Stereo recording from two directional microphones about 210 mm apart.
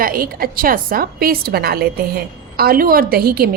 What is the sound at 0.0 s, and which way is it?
A woman's voice, 45° right (ahead or behind).